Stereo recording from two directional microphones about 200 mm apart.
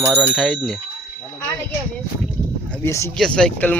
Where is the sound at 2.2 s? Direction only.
5° left (ahead or behind).